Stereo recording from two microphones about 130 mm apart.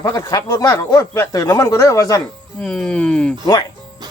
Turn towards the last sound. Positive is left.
turn(degrees=30)  # may be behind; listen again after turning